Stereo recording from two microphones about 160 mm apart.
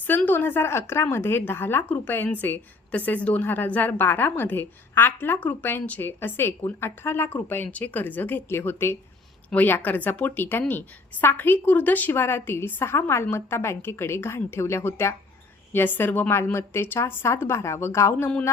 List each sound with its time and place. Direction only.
0.3 s speech: 15° left (ahead or behind)